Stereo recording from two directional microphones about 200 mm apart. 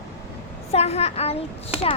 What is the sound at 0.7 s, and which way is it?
Speech, 30° left (ahead or behind).